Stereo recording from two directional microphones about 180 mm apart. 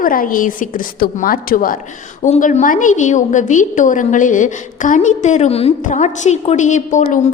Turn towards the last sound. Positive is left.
turn(degrees=45)  # may be behind; listen again after turning